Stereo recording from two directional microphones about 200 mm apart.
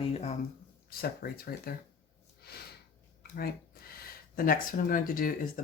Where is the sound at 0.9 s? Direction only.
50° left (ahead or behind).